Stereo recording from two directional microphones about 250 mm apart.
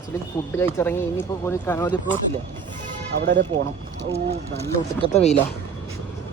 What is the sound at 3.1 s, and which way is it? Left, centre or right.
Speech, right.